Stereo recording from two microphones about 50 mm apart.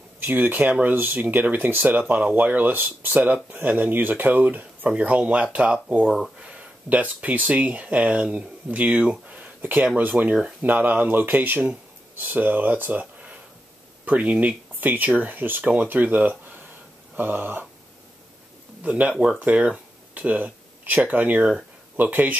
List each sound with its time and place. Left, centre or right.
0.2 s speech: right
8.9 s speech: centre
9.3 s a sound: right
9.9 s speech: right
14.0 s speech: right
18.8 s speech: right
21.4 s speech: right
21.9 s speech: right